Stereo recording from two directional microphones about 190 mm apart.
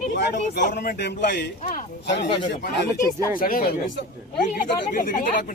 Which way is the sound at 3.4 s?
50° left (ahead or behind).